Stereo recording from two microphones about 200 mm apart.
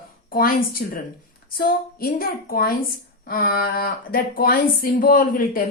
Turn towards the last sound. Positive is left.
turn(degrees=45)  # may be behind; listen again after turning